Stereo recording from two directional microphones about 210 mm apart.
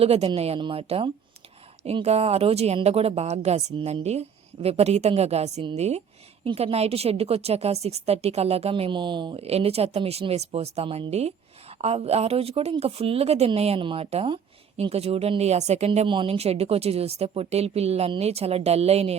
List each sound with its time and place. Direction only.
0.0 s a woman's voice: 30° right (ahead or behind)